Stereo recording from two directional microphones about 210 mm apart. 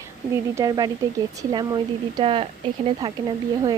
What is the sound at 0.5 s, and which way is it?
A woman's voice, 15° right (ahead or behind).